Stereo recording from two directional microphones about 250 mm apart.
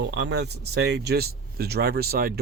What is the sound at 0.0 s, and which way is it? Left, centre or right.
Speech, right.